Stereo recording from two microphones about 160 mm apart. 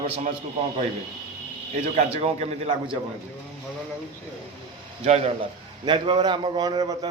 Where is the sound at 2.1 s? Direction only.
40° right (ahead or behind).